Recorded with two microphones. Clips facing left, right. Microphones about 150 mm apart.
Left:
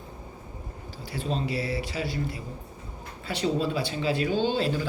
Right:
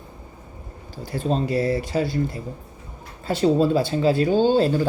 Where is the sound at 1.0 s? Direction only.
45° right (ahead or behind).